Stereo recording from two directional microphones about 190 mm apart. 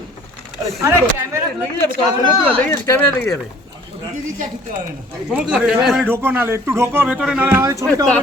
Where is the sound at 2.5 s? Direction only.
10° left (ahead or behind).